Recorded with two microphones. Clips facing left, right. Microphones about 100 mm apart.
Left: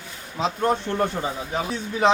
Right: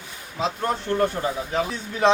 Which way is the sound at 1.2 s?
5° left (ahead or behind).